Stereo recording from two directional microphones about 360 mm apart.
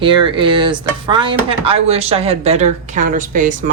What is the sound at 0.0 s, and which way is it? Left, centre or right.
Speech, centre.